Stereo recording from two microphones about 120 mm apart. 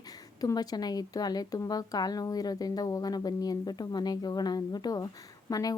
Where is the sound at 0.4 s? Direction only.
35° left (ahead or behind).